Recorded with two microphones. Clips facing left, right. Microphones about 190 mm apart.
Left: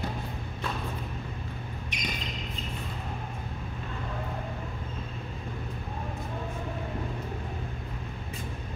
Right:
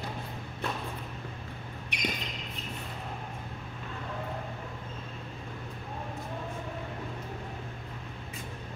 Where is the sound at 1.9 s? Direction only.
65° right (ahead or behind).